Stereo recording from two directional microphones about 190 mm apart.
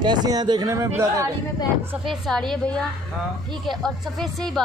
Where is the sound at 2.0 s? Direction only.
Centre (ahead or behind).